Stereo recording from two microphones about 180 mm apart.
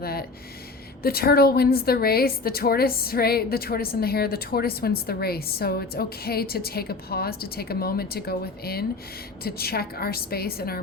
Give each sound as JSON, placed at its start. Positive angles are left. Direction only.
{"t": 0.0, "sound": "a woman's voice", "side_deg": 60}